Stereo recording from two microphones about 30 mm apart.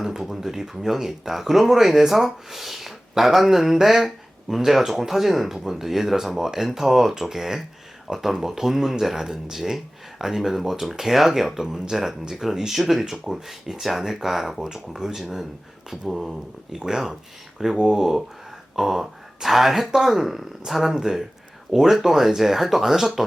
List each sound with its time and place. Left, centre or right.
0.2 s speech: centre
15.9 s speech: centre
17.8 s speech: centre